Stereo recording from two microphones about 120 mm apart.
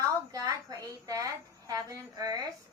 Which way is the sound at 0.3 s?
30° right (ahead or behind).